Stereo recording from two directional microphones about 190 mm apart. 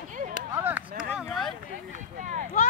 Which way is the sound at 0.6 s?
5° right (ahead or behind).